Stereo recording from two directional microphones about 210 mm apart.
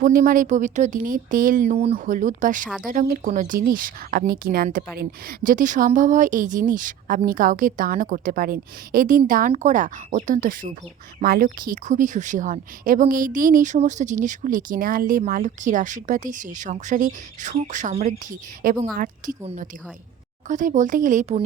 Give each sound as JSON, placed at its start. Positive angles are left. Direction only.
{"t": 0.0, "sound": "a woman's voice", "side_deg": -40}